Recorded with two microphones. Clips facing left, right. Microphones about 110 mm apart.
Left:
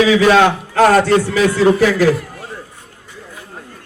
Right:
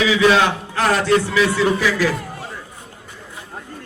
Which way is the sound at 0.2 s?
50° left (ahead or behind).